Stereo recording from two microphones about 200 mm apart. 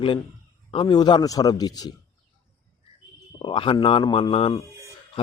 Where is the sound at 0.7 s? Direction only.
25° left (ahead or behind).